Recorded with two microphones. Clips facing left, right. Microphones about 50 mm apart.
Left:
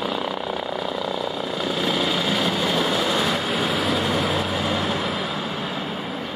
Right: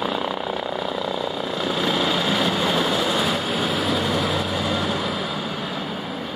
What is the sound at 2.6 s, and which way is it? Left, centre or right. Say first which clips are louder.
Vehicle: right 1 dB; centre.